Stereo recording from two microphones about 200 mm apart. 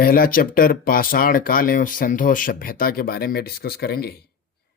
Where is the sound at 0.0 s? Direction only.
45° left (ahead or behind).